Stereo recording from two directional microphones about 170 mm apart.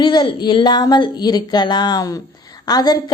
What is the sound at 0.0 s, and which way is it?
A woman's voice, 25° left (ahead or behind).